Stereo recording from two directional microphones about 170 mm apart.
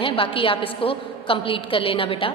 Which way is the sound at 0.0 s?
30° left (ahead or behind).